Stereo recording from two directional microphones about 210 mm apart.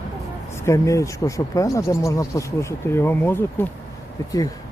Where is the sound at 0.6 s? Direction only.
15° left (ahead or behind).